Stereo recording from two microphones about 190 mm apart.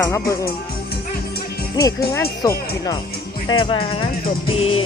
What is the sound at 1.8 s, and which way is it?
Speech, 20° left (ahead or behind).